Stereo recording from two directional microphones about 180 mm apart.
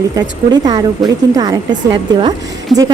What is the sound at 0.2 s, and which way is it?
Speech, 20° right (ahead or behind).